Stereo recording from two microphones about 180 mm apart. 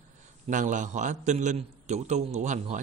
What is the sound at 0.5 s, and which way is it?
A man's voice, 45° right (ahead or behind).